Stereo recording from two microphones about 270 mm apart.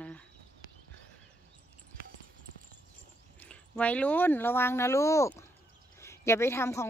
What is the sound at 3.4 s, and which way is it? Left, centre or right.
A woman's voice, centre.